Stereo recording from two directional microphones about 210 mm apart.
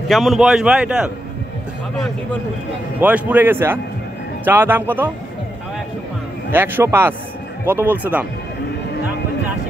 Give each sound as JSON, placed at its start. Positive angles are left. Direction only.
{"t": 0.1, "sound": "a man's voice", "side_deg": 0}
{"t": 3.0, "sound": "a man's voice", "side_deg": -10}
{"t": 6.5, "sound": "a man's voice", "side_deg": -10}